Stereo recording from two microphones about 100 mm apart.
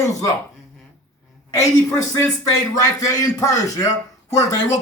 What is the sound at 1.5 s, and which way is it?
Speech, 35° left (ahead or behind).